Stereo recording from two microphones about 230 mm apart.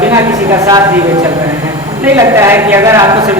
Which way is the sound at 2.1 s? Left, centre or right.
Centre.